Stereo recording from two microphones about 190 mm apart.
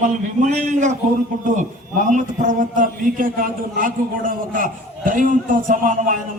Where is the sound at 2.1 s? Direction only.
40° right (ahead or behind).